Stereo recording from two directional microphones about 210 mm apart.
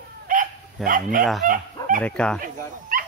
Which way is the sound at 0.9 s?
40° right (ahead or behind).